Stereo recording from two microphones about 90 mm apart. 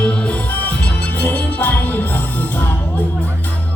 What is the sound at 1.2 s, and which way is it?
Music, 20° left (ahead or behind).